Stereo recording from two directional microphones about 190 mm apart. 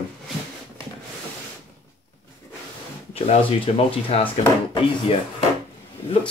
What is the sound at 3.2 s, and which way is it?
Speech, 30° left (ahead or behind).